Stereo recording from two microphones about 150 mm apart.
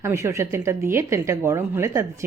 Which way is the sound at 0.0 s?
20° right (ahead or behind).